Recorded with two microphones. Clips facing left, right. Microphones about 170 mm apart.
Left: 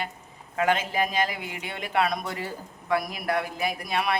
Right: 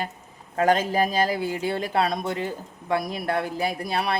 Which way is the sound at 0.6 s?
40° right (ahead or behind).